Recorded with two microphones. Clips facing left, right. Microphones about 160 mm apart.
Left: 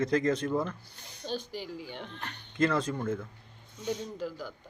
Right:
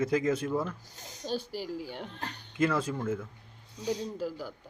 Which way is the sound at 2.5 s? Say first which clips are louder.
Left 1 dB; 10° right (ahead or behind).